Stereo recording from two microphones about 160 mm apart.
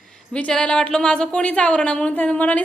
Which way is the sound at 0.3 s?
5° left (ahead or behind).